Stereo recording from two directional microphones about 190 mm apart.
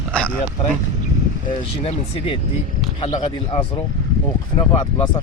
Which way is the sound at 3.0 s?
30° left (ahead or behind).